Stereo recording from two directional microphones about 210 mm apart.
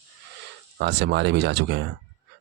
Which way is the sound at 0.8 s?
55° right (ahead or behind).